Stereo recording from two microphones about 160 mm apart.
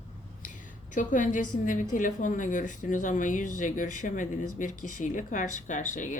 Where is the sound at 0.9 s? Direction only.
55° left (ahead or behind).